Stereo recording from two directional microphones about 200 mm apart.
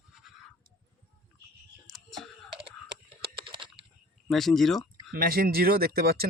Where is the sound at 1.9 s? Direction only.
Centre (ahead or behind).